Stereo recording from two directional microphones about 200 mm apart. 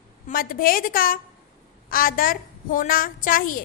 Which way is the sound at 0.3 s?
45° left (ahead or behind).